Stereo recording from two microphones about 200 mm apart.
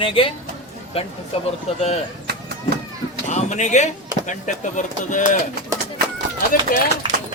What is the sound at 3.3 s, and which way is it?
Speech, 35° left (ahead or behind).